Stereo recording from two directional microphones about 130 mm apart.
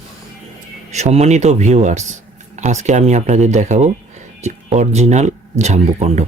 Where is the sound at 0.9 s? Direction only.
60° right (ahead or behind).